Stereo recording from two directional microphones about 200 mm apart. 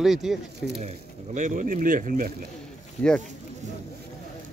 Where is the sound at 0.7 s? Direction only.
35° right (ahead or behind).